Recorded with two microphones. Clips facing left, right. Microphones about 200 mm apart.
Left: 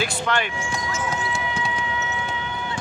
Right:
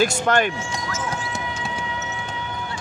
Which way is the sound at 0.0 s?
45° right (ahead or behind).